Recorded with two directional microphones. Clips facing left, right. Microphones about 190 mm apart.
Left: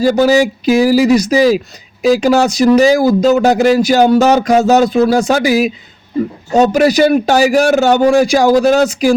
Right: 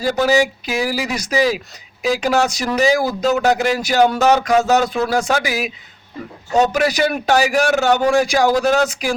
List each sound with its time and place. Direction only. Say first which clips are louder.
0.0 s a man's voice: left 6 dB; 30° left (ahead or behind)